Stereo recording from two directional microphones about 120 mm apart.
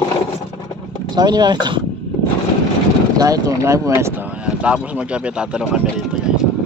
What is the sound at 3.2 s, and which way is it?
Speech, 30° right (ahead or behind).